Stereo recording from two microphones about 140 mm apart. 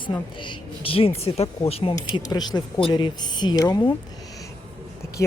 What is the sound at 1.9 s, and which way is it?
Speech, 30° left (ahead or behind).